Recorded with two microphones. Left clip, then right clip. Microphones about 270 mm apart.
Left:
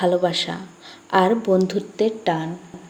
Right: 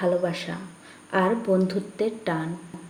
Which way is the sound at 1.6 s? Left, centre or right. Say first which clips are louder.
Left 5 dB; centre.